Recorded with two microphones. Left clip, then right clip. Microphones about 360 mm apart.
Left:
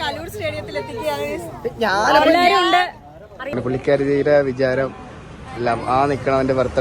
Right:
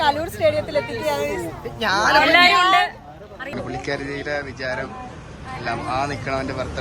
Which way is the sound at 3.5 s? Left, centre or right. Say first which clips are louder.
Left 9 dB; centre.